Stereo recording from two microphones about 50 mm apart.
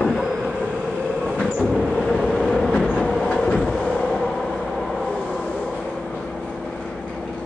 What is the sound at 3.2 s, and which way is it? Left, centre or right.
Train, centre.